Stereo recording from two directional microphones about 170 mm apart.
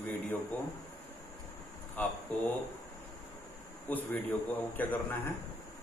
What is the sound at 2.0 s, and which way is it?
Speech, 10° left (ahead or behind).